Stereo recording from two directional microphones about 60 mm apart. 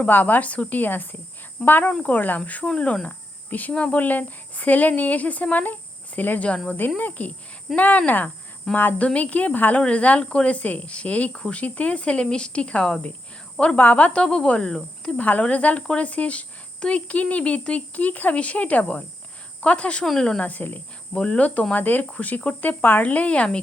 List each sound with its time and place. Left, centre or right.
0.0 s speech: left